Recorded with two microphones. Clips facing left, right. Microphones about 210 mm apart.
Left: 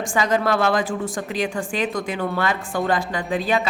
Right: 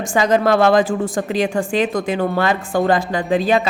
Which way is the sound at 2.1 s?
30° right (ahead or behind).